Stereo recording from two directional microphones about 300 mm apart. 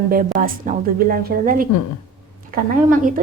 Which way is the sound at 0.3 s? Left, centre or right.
Right.